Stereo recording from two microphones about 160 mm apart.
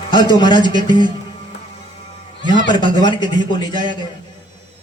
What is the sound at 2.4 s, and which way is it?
A man's voice, 30° left (ahead or behind).